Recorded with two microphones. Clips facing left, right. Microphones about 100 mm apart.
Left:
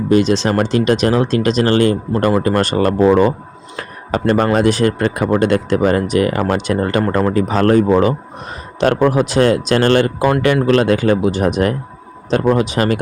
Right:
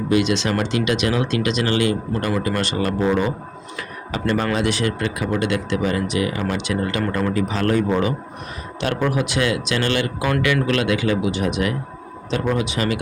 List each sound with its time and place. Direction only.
0.1 s speech: 35° left (ahead or behind)
3.8 s a sound: 45° left (ahead or behind)
4.5 s speech: 40° left (ahead or behind)